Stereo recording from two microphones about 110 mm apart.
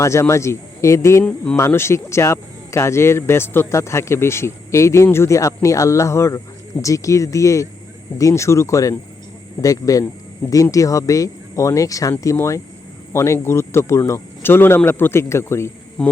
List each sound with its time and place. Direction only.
0.0 s speech: 25° left (ahead or behind)
1.2 s speech: 10° left (ahead or behind)
1.5 s speech: 25° left (ahead or behind)
16.0 s speech: 5° left (ahead or behind)